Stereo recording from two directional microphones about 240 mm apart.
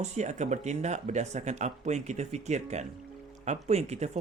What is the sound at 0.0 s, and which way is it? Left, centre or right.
Speech, right.